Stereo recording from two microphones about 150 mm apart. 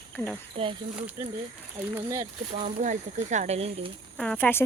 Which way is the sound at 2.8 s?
55° right (ahead or behind).